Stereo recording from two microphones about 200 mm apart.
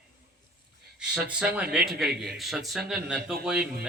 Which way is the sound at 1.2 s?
5° right (ahead or behind).